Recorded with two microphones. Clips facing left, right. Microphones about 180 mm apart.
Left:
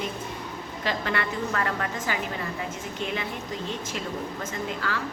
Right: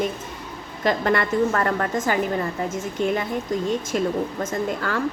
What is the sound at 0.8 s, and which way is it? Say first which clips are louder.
A woman's voice: right 8 dB; 50° right (ahead or behind).